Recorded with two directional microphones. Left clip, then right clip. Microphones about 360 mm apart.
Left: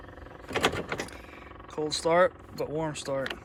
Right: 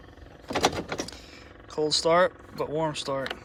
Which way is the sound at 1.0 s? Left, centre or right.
Centre.